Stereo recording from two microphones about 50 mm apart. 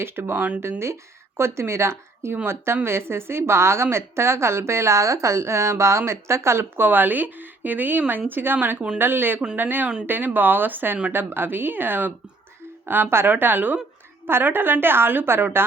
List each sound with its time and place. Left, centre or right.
0.0 s a woman's voice: right
6.7 s a woman's voice: right